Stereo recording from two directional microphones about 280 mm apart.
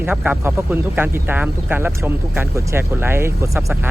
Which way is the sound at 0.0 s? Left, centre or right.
Centre.